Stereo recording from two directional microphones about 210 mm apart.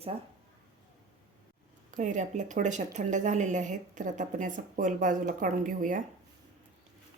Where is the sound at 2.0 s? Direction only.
35° right (ahead or behind).